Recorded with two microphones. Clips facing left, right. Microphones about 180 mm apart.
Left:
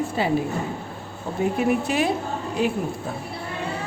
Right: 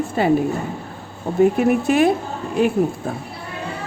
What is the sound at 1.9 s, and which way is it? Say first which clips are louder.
Speech: right 7 dB; 50° right (ahead or behind).